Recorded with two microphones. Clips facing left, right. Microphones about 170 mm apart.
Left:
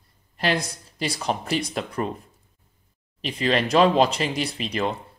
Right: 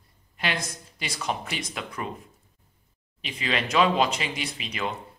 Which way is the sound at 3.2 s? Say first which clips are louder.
Left 6 dB; 35° left (ahead or behind).